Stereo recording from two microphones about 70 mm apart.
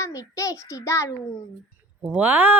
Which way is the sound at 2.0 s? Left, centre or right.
Right.